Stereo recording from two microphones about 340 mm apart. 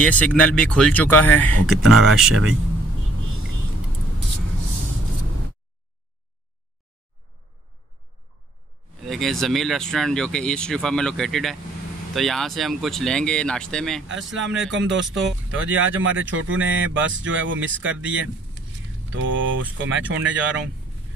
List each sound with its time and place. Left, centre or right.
0.0 s speech: centre
9.0 s speech: centre
14.0 s speech: right